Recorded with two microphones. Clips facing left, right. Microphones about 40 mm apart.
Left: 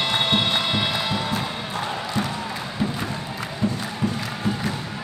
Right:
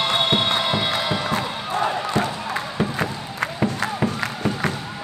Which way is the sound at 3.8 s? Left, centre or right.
Right.